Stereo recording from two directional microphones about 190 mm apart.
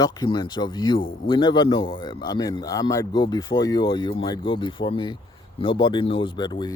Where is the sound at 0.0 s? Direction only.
20° left (ahead or behind).